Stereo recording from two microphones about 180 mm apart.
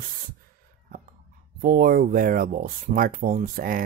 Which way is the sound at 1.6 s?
50° right (ahead or behind).